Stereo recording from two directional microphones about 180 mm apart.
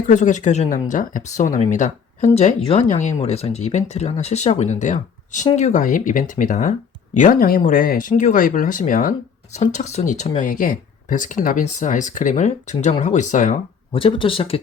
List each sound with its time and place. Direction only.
0.1 s speech: 45° left (ahead or behind)
13.9 s speech: 30° left (ahead or behind)